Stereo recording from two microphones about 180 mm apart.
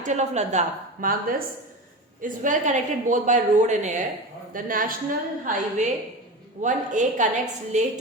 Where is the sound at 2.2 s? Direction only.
45° right (ahead or behind).